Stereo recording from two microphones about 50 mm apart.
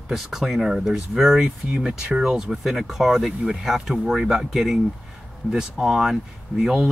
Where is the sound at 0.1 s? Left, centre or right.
Centre.